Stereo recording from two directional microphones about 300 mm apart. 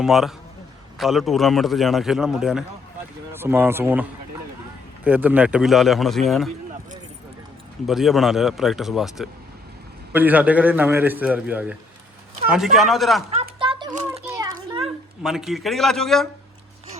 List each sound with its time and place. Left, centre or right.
0.0 s a man's voice: centre
5.0 s a man's voice: centre
7.9 s a man's voice: centre
13.6 s a sound: centre
15.2 s a man's voice: centre